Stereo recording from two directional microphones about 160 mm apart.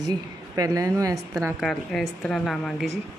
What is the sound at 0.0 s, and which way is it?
A woman's voice, 25° right (ahead or behind).